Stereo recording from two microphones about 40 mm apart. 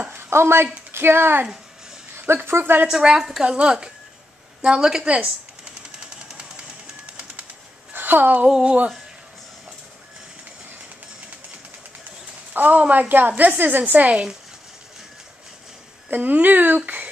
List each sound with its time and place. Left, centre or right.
0.1 s a sound: right
0.9 s speech: right
2.1 s speech: right
2.9 s a woman's voice: centre
3.4 s a woman's voice: right
5.0 s a woman's voice: right
5.9 s a sound: centre
7.9 s a sound: right
8.5 s a woman's voice: centre
12.5 s a woman's voice: right
16.1 s speech: right